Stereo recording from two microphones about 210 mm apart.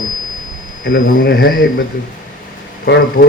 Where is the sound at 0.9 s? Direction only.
45° left (ahead or behind).